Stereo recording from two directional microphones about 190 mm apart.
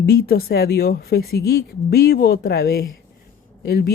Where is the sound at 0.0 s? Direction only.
55° left (ahead or behind).